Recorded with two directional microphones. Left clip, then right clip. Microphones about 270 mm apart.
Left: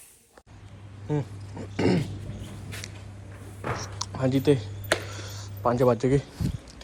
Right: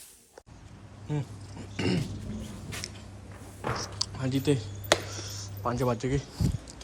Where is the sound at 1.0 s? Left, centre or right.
Centre.